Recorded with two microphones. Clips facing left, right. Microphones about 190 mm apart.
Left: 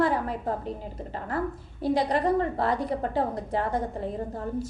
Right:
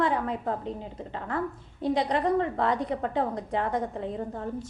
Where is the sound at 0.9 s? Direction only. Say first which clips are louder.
Left 2 dB; 40° left (ahead or behind).